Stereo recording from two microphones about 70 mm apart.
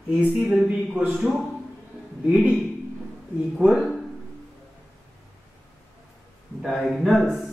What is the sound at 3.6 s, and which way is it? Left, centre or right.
Speech, right.